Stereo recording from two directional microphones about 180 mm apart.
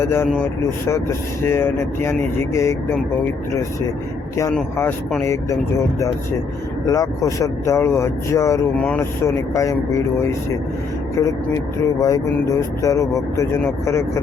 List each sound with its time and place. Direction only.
0.0 s speech: 15° left (ahead or behind)
4.5 s speech: 5° left (ahead or behind)
6.8 s speech: 20° left (ahead or behind)
11.9 s speech: 20° left (ahead or behind)